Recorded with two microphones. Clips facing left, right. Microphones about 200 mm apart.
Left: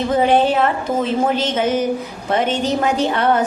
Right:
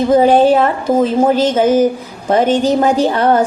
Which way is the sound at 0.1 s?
35° right (ahead or behind).